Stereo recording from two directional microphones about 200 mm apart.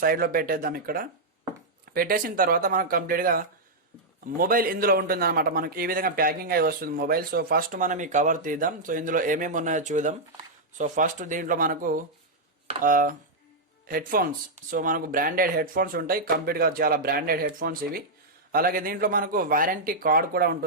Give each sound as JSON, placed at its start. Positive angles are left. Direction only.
{"t": 0.0, "sound": "a man's voice", "side_deg": -45}